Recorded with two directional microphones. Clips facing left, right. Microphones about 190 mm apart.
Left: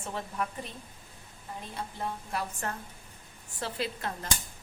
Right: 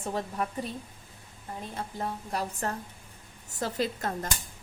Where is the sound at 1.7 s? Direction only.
40° right (ahead or behind).